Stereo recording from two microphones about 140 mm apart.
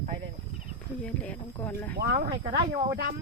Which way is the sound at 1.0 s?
10° left (ahead or behind).